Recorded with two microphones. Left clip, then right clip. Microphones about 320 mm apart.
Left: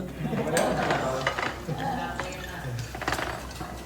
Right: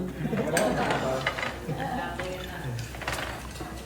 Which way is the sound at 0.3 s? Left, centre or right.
Centre.